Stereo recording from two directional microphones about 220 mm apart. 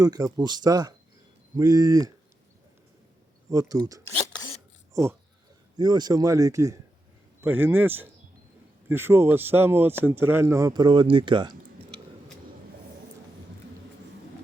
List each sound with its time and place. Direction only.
0.0 s speech: 15° right (ahead or behind)
3.5 s speech: 15° right (ahead or behind)
4.2 s a sound: 25° left (ahead or behind)
4.9 s speech: 15° right (ahead or behind)